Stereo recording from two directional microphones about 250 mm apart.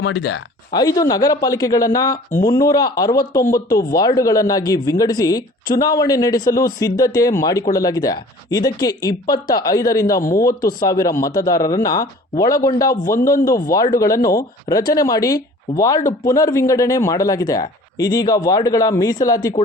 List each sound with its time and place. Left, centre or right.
0.0 s speech: left
0.7 s speech: centre